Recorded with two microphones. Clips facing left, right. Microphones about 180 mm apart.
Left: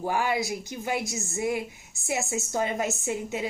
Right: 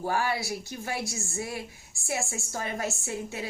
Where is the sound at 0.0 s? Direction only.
20° left (ahead or behind).